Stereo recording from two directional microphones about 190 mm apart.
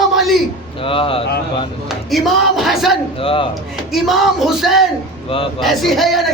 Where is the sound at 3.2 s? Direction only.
30° left (ahead or behind).